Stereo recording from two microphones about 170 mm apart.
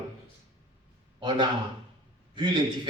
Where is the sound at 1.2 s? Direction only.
30° right (ahead or behind).